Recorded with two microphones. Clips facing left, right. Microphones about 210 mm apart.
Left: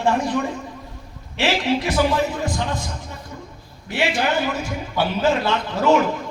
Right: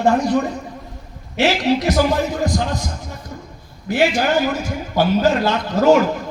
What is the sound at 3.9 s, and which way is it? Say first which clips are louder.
A man's voice: right 5 dB; 45° right (ahead or behind).